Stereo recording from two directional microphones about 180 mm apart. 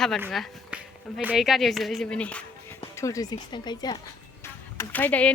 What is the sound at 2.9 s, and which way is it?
Speech, 15° left (ahead or behind).